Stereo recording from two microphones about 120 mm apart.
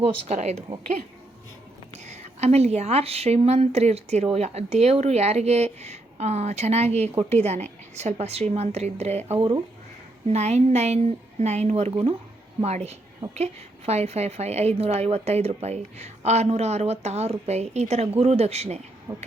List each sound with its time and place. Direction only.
0.0 s speech: 70° right (ahead or behind)
2.0 s a woman's voice: 70° right (ahead or behind)
11.9 s speech: 50° right (ahead or behind)
12.6 s a woman's voice: 65° right (ahead or behind)
19.1 s speech: 20° right (ahead or behind)